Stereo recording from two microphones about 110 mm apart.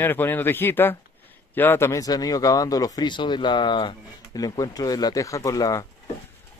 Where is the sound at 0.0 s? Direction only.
20° left (ahead or behind).